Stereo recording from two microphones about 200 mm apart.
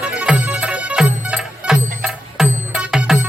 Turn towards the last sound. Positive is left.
turn(degrees=-5)  # may be behind; listen again after turning